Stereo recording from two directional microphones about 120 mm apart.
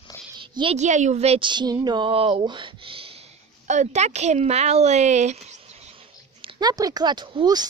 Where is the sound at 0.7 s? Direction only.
80° right; by 1.4 s 60° right (ahead or behind).